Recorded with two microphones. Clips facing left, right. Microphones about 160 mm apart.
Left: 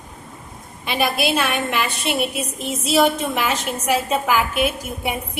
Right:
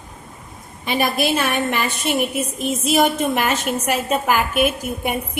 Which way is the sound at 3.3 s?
55° right (ahead or behind).